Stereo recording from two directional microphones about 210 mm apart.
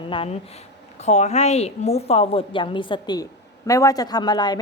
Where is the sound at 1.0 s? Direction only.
30° left (ahead or behind).